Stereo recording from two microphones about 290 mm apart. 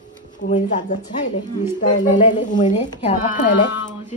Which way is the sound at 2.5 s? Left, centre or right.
Centre.